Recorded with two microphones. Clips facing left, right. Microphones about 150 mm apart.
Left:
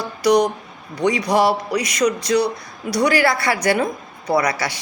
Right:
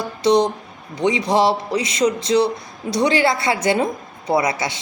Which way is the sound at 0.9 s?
25° right (ahead or behind).